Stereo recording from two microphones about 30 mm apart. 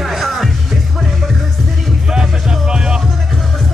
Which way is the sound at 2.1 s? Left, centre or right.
Right.